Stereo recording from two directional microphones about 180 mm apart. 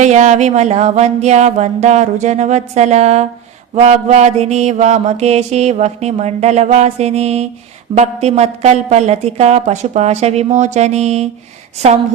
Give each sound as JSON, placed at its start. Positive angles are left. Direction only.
{"t": 0.0, "sound": "mantra", "side_deg": -40}